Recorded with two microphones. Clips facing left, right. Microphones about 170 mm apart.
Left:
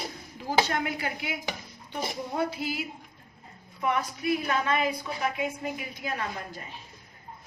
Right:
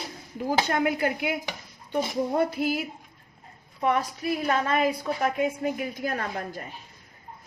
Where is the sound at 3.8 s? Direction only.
35° right (ahead or behind).